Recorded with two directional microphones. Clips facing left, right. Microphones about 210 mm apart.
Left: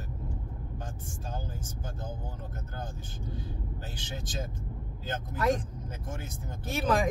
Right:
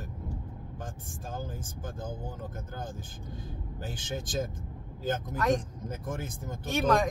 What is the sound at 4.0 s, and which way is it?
Speech, 50° right (ahead or behind).